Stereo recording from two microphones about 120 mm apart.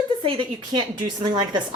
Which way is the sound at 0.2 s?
45° right (ahead or behind).